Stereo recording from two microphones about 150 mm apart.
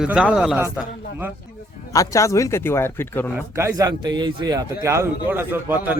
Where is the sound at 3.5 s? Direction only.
20° right (ahead or behind).